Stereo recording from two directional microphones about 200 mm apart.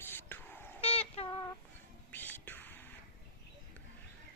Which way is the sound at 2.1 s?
10° left (ahead or behind).